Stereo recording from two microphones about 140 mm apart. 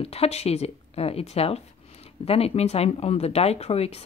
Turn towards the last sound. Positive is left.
turn(degrees=50)  # may be behind; listen again after turning